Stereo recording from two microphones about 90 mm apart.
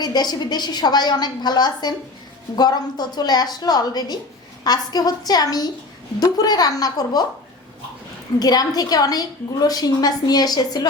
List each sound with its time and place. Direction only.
0.0 s a woman's voice: 50° left (ahead or behind)
8.4 s a woman's voice: 45° left (ahead or behind)